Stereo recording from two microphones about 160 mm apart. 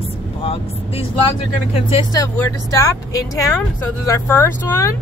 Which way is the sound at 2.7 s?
20° left (ahead or behind).